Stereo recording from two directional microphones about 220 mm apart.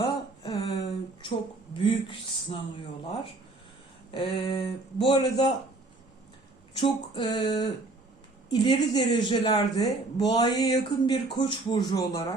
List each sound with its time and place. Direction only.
0.0 s a sound: 20° left (ahead or behind)
1.8 s speech: 25° left (ahead or behind)
4.1 s speech: 20° left (ahead or behind)
6.7 s speech: 20° left (ahead or behind)